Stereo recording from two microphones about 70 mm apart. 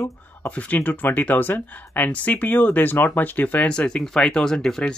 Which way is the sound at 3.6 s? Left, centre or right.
Centre.